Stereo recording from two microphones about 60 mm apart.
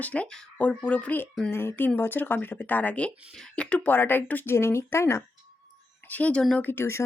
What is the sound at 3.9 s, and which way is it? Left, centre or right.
Speech, left.